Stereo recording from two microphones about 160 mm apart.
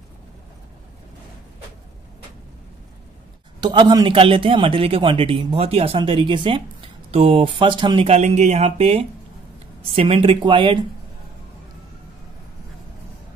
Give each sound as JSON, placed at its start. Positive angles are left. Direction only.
{"t": 3.6, "sound": "a man's voice", "side_deg": -25}
{"t": 8.1, "sound": "a man's voice", "side_deg": -45}